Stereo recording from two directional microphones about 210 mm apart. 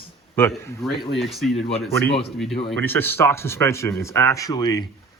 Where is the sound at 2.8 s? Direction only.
10° left (ahead or behind).